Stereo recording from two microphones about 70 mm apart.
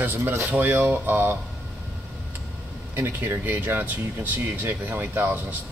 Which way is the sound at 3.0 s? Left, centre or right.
Right.